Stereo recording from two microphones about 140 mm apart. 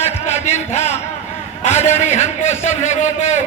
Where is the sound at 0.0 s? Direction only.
50° left (ahead or behind).